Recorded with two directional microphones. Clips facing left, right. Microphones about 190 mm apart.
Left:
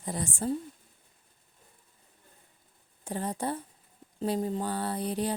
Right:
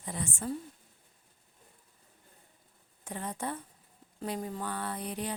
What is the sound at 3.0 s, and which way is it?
Speech, 30° left (ahead or behind).